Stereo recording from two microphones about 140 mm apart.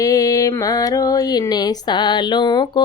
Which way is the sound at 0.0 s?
25° left (ahead or behind).